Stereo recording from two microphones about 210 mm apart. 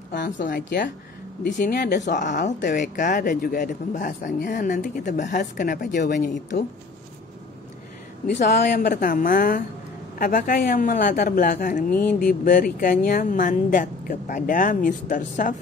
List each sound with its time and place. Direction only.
0.4 s speech: 40° left (ahead or behind)
2.0 s speech: 35° left (ahead or behind)
8.5 s speech: 50° left (ahead or behind)